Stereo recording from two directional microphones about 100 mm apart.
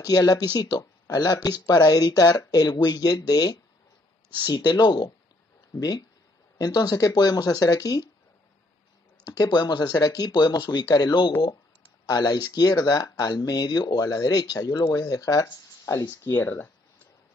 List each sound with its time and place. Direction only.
0.0 s speech: 40° left (ahead or behind)
9.2 s speech: 40° left (ahead or behind); by 16.7 s 20° left (ahead or behind)